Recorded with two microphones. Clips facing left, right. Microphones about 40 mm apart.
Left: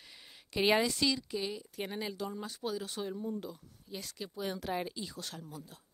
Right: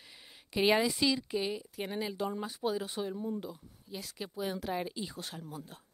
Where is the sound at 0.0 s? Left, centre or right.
Centre.